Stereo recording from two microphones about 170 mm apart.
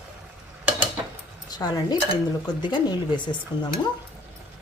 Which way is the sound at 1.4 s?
25° left (ahead or behind).